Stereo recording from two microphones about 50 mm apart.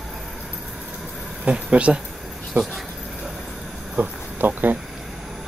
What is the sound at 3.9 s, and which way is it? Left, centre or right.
Speech, right.